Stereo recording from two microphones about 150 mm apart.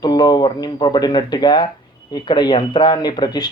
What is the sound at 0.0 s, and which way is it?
Speech, 25° left (ahead or behind).